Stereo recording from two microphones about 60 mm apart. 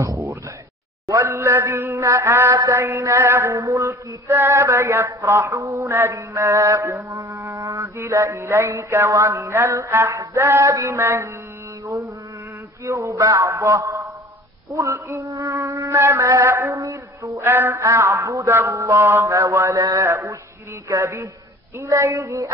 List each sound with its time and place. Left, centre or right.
1.2 s female singing: right
10.0 s male singing: right
10.4 s female singing: right
10.7 s female singing: right
11.8 s mantra: right
12.8 s female singing: right
15.6 s female singing: right
16.8 s a sound: right
17.4 s female singing: right
20.0 s female singing: right